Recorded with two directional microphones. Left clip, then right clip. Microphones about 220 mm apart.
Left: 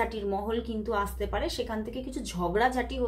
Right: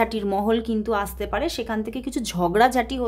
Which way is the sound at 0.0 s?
45° right (ahead or behind).